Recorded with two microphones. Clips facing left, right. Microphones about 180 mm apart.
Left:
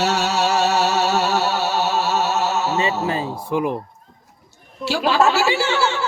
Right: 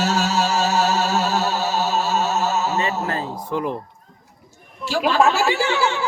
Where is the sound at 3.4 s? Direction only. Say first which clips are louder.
Left 4 dB; 10° left (ahead or behind).